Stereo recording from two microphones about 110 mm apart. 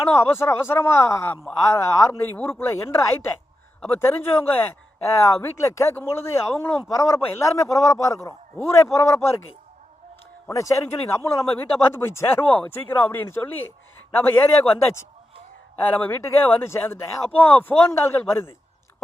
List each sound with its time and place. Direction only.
0.2 s a man's voice: 20° left (ahead or behind)
10.5 s a man's voice: 30° left (ahead or behind)
15.8 s a man's voice: 15° left (ahead or behind)